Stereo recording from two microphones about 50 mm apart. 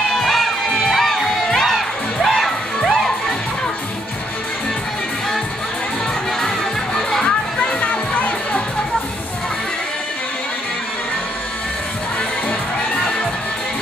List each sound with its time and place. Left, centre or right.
0.1 s music: centre
6.4 s music: centre
7.2 s music: left